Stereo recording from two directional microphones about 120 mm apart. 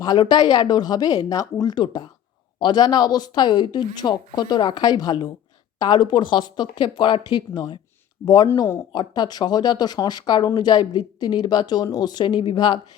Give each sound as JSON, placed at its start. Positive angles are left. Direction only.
{"t": 0.0, "sound": "speech", "side_deg": 35}
{"t": 8.5, "sound": "speech", "side_deg": 25}
{"t": 8.9, "sound": "speech", "side_deg": 35}